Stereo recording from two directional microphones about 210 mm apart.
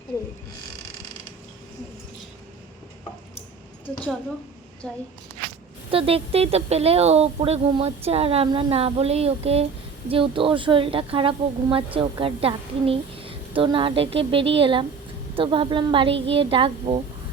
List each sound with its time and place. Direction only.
4.8 s a woman's voice: 5° left (ahead or behind)
5.9 s speech: 25° right (ahead or behind)